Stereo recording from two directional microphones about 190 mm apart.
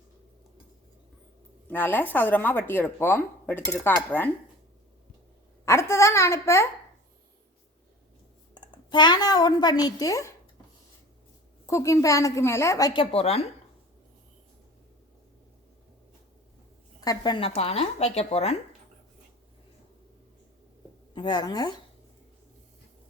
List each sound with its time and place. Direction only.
1.7 s speech: 10° left (ahead or behind)
5.6 s speech: 15° left (ahead or behind)
8.6 s a woman's voice: 25° left (ahead or behind)
11.6 s speech: 15° left (ahead or behind); by 13.4 s 30° left (ahead or behind)
17.0 s speech: 20° left (ahead or behind)
21.2 s a woman's voice: 25° left (ahead or behind)